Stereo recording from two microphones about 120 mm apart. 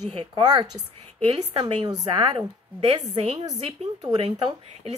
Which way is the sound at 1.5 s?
45° right (ahead or behind).